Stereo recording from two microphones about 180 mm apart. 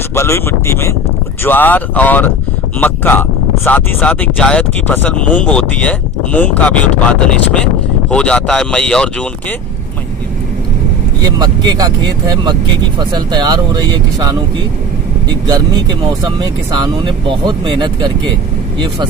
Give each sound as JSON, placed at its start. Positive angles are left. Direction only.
{"t": 0.1, "sound": "speech", "side_deg": 15}
{"t": 11.3, "sound": "speech", "side_deg": -20}
{"t": 15.4, "sound": "speech", "side_deg": -25}